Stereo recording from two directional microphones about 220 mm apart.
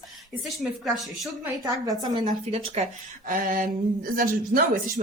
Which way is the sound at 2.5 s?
30° right (ahead or behind).